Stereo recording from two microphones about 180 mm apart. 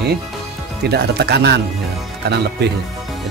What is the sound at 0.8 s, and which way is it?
Speech, 65° right (ahead or behind).